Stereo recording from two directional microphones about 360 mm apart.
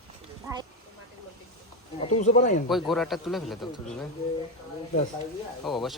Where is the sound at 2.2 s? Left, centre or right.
Centre.